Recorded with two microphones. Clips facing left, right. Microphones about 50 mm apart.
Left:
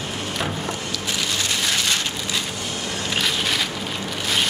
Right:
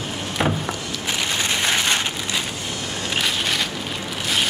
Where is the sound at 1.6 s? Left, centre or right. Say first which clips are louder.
Right 3 dB; right.